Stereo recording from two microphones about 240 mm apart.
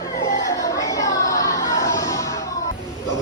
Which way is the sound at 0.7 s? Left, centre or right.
Centre.